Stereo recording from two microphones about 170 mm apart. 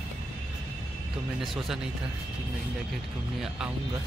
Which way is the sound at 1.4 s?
Centre (ahead or behind).